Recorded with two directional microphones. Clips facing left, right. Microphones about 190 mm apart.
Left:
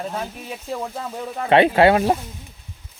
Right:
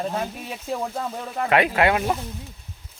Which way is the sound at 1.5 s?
30° left (ahead or behind).